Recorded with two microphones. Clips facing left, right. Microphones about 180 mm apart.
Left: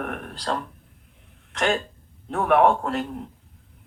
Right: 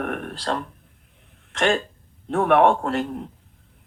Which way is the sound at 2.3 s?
30° right (ahead or behind).